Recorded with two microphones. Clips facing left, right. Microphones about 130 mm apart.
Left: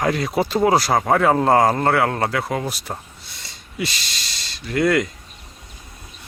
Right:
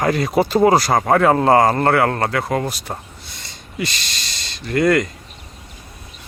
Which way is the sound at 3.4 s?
Centre (ahead or behind).